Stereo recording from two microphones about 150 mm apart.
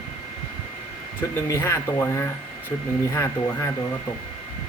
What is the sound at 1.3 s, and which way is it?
Speech, 15° left (ahead or behind).